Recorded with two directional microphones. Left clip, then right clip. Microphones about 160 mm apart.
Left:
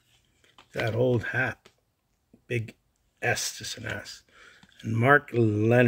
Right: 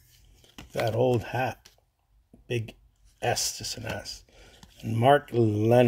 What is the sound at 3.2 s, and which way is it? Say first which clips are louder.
Speech: even; 20° left (ahead or behind).